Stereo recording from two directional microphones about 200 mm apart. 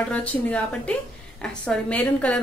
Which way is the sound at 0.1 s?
5° left (ahead or behind).